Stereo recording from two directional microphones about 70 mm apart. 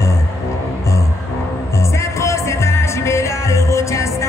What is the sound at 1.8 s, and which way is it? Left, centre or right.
Music, left.